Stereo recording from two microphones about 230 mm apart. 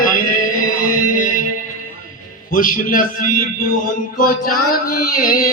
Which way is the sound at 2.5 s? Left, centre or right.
Left.